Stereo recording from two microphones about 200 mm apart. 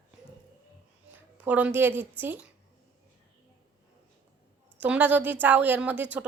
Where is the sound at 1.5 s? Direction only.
5° right (ahead or behind).